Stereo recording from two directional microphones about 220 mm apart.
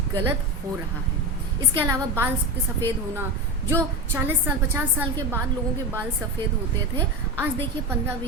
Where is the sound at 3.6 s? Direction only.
10° right (ahead or behind).